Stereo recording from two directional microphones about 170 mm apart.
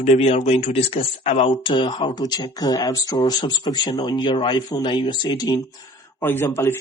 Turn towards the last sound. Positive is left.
turn(degrees=15)  # may be behind; listen again after turning